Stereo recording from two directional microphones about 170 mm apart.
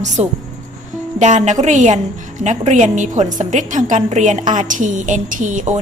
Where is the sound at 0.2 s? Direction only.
40° right (ahead or behind).